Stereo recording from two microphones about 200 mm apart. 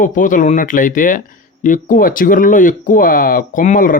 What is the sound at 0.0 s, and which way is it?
Speech, 40° left (ahead or behind).